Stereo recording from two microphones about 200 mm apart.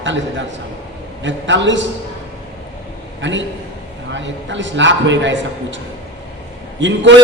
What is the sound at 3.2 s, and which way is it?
A man's voice, 65° right (ahead or behind).